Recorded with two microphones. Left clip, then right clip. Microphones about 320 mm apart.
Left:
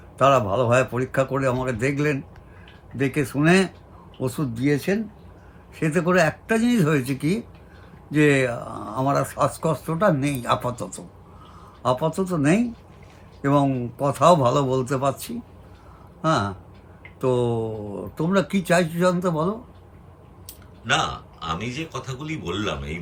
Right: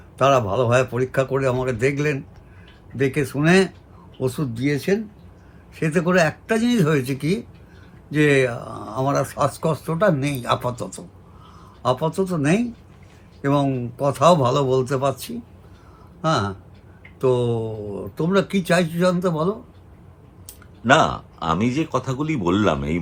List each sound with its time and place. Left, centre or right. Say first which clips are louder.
0.2 s speech: right 1 dB; centre
20.8 s speech: right 7 dB; centre